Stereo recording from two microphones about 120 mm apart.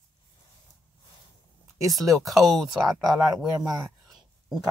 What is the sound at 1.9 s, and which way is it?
Speech, centre (ahead or behind).